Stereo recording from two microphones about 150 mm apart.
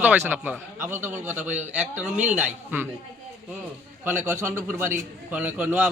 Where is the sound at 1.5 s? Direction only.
50° right (ahead or behind).